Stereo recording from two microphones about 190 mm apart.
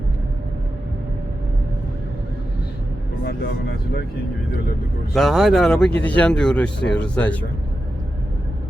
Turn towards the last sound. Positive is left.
turn(degrees=10)  # may be behind; listen again after turning